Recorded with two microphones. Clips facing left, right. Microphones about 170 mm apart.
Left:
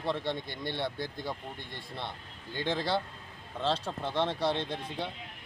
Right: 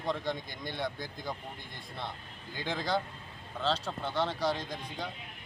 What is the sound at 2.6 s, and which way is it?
Speech, 25° left (ahead or behind).